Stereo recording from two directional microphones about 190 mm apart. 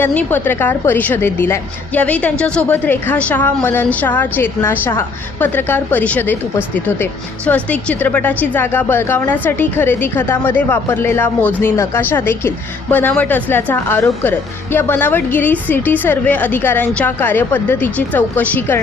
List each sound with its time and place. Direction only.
0.0 s a woman's voice: 10° left (ahead or behind)